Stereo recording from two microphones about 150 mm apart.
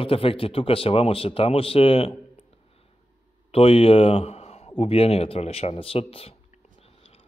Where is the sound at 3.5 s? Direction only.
40° left (ahead or behind).